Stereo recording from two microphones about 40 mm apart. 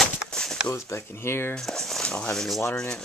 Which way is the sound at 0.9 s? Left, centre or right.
Left.